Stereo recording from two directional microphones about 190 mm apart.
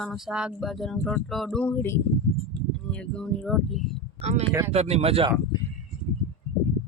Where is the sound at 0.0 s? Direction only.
Centre (ahead or behind).